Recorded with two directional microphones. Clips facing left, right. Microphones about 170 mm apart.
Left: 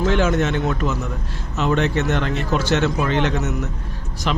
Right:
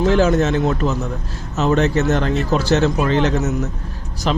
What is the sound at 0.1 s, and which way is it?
A man's voice, 35° right (ahead or behind).